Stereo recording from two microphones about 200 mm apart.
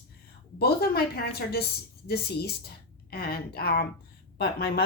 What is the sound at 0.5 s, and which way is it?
A woman's voice, 50° left (ahead or behind).